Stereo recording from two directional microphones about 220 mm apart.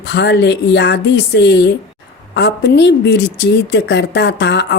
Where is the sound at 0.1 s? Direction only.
50° left (ahead or behind).